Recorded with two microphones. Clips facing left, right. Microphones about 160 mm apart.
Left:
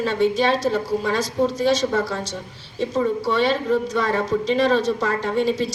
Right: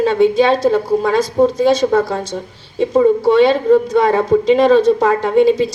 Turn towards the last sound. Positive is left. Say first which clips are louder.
# right 9 dB
turn(degrees=-55)  # may be behind; listen again after turning